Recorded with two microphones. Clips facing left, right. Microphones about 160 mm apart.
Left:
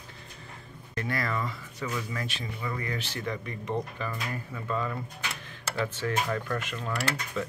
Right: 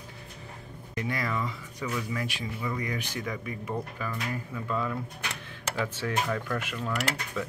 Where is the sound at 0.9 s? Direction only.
15° right (ahead or behind).